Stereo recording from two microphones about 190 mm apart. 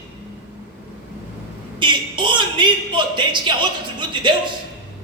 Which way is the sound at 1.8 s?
25° right (ahead or behind).